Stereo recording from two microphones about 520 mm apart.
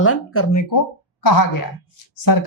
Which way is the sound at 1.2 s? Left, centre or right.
Left.